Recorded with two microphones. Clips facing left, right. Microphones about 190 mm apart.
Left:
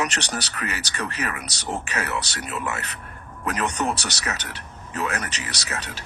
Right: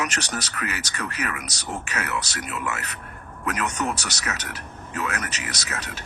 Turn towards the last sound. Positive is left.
turn(degrees=30)  # may be behind; listen again after turning